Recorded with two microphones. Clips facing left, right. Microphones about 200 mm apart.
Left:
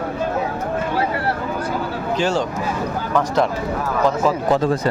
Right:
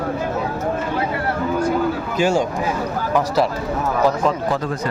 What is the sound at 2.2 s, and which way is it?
Speech, 10° right (ahead or behind).